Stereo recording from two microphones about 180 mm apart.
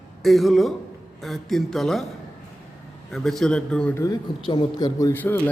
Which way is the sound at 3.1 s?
Centre (ahead or behind).